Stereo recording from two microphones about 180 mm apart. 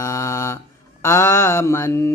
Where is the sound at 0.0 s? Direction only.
15° left (ahead or behind).